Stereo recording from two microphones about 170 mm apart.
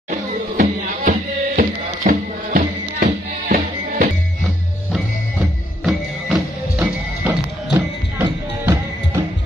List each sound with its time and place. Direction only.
0.1 s music: 50° right (ahead or behind)
5.9 s music: centre (ahead or behind)
7.2 s music: 15° right (ahead or behind)